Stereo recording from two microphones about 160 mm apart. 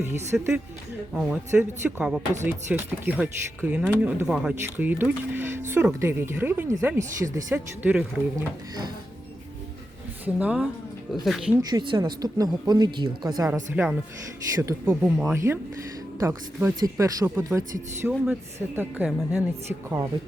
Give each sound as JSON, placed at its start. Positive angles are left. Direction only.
{"t": 0.3, "sound": "speech", "side_deg": -5}
{"t": 8.4, "sound": "speech", "side_deg": -25}
{"t": 10.2, "sound": "speech", "side_deg": -10}
{"t": 11.7, "sound": "speech", "side_deg": -30}
{"t": 13.8, "sound": "speech", "side_deg": -10}